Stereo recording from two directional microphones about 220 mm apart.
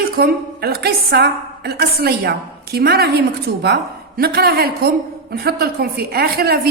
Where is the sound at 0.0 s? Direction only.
45° right (ahead or behind).